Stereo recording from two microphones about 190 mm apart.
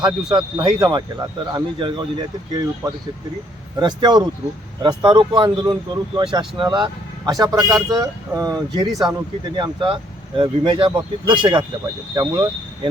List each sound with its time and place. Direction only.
0.0 s speech: 20° right (ahead or behind)
8.9 s speech: centre (ahead or behind)
9.4 s speech: 25° right (ahead or behind)